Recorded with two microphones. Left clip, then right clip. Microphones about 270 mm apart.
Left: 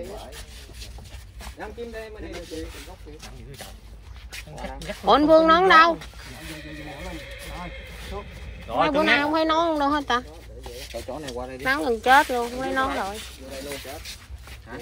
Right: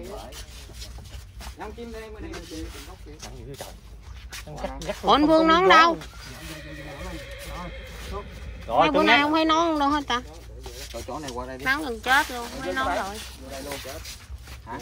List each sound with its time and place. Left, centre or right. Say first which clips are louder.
4.3 s speech: right 2 dB; right
5.0 s speech: left 2 dB; centre
8.9 s speech: right 1 dB; right
9.3 s speech: even; centre